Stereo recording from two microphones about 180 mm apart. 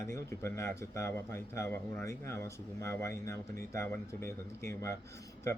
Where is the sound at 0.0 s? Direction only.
15° left (ahead or behind).